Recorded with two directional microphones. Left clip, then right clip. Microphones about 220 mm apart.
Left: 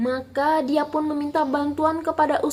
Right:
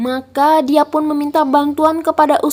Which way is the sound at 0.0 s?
45° right (ahead or behind).